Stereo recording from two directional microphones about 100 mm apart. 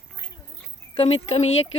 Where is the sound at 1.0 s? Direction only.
90° left.